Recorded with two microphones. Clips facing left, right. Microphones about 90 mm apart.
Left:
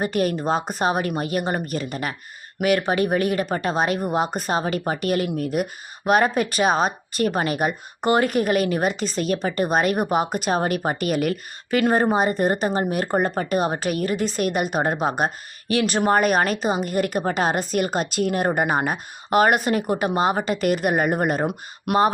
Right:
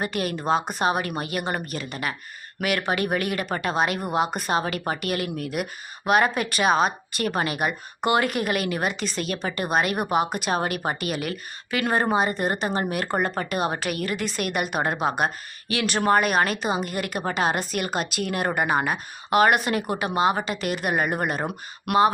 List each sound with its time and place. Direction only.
0.0 s a woman's voice: 40° left (ahead or behind)